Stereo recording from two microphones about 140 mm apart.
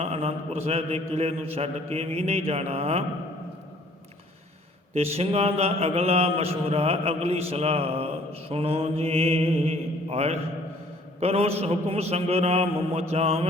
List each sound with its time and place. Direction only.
0.0 s speech: 45° right (ahead or behind)
4.9 s speech: 45° right (ahead or behind)